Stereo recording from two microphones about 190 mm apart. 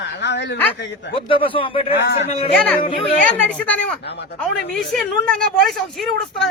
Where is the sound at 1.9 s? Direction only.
65° left (ahead or behind).